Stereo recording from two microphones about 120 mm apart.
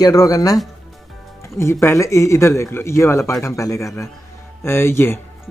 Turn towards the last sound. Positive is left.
turn(degrees=20)  # may be behind; listen again after turning